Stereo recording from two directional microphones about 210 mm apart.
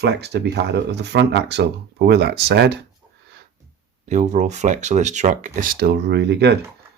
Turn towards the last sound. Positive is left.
turn(degrees=-55)  # may be behind; listen again after turning